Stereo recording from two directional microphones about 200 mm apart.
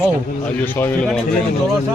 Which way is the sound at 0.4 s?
10° left (ahead or behind).